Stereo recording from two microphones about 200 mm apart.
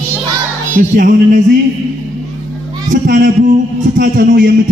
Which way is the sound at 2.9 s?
45° right (ahead or behind).